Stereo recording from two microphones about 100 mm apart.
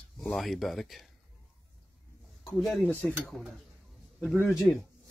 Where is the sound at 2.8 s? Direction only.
15° left (ahead or behind).